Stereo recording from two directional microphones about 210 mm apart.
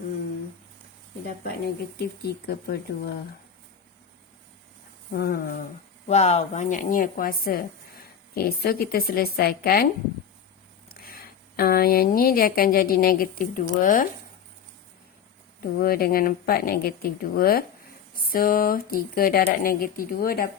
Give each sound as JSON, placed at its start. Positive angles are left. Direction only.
{"t": 1.6, "sound": "speech", "side_deg": 50}
{"t": 5.1, "sound": "speech", "side_deg": 45}
{"t": 6.1, "sound": "a woman's voice", "side_deg": 30}
{"t": 15.8, "sound": "speech", "side_deg": 45}